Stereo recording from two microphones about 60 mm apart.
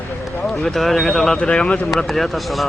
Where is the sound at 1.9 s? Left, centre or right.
Centre.